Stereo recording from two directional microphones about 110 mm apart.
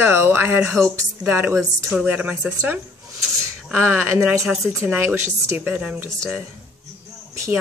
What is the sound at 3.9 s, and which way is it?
Speech, 15° right (ahead or behind).